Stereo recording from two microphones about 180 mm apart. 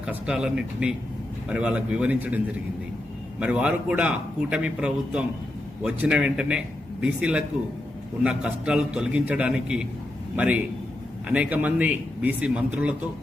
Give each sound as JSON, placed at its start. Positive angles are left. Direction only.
{"t": 0.0, "sound": "a man's voice", "side_deg": -5}
{"t": 3.4, "sound": "a man's voice", "side_deg": -5}